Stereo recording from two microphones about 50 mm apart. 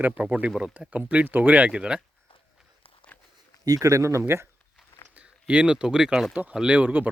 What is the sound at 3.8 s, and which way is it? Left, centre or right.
Speech, right.